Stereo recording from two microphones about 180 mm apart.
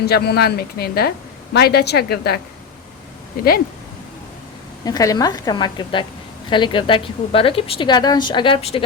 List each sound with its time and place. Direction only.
0.0 s speech: 65° left (ahead or behind)
4.9 s speech: 20° left (ahead or behind)